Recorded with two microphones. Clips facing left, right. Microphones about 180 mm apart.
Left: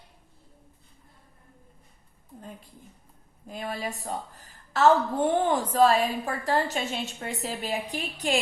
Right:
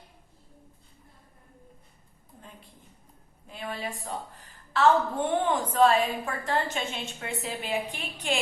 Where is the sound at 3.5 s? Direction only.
40° left (ahead or behind).